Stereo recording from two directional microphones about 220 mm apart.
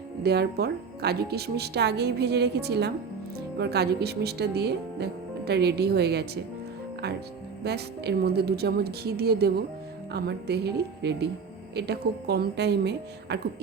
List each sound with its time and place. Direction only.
0.2 s speech: 45° right (ahead or behind)
7.6 s speech: 50° right (ahead or behind)